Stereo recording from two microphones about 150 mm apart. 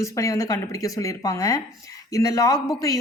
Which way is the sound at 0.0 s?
20° left (ahead or behind).